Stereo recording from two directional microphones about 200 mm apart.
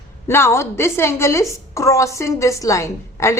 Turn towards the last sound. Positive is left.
turn(degrees=15)  # may be behind; listen again after turning